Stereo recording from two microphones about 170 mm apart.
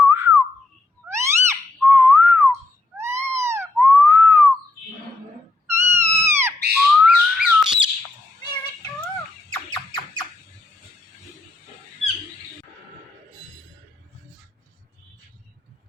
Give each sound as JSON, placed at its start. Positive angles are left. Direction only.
{"t": 0.0, "sound": "whistling", "side_deg": -15}
{"t": 1.0, "sound": "a sound", "side_deg": -15}
{"t": 1.8, "sound": "whistling", "side_deg": -10}
{"t": 3.0, "sound": "a sound", "side_deg": -15}
{"t": 5.6, "sound": "cat", "side_deg": -15}
{"t": 6.7, "sound": "whistle", "side_deg": -5}
{"t": 9.6, "sound": "squeal", "side_deg": 25}